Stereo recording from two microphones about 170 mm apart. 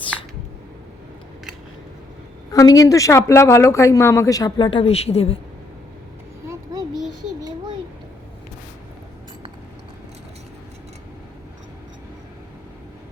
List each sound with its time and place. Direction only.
2.5 s a woman's voice: 20° left (ahead or behind); by 5.4 s 35° left (ahead or behind)